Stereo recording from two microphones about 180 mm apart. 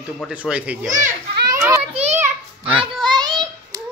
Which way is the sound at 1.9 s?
35° right (ahead or behind).